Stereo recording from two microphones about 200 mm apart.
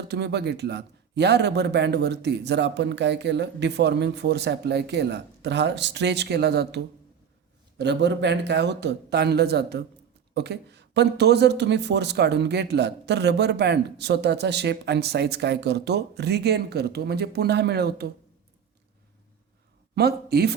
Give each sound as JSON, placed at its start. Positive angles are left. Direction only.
{"t": 0.1, "sound": "speech", "side_deg": -55}
{"t": 20.0, "sound": "speech", "side_deg": -50}